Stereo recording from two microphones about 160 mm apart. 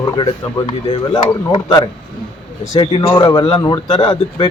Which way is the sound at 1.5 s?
25° left (ahead or behind).